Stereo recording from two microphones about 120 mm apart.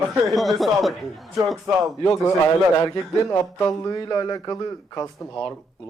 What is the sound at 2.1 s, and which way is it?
A man's voice, 30° left (ahead or behind).